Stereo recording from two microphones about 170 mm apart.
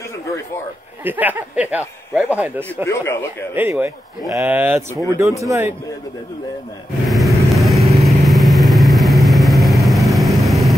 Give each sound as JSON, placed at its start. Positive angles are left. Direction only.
{"t": 1.0, "sound": "speech", "side_deg": -10}
{"t": 2.8, "sound": "speech", "side_deg": 15}
{"t": 3.5, "sound": "speech", "side_deg": -10}
{"t": 7.1, "sound": "vehicle", "side_deg": 0}